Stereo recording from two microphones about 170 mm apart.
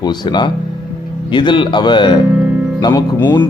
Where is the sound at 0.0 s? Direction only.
25° left (ahead or behind).